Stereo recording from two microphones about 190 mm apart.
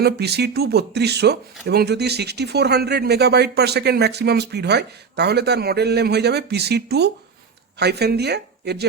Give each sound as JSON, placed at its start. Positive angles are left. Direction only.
{"t": 0.0, "sound": "speech", "side_deg": -60}